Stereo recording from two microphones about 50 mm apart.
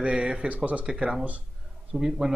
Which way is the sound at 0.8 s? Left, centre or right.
Centre.